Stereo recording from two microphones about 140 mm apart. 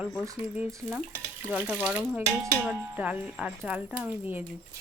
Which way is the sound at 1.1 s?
15° right (ahead or behind).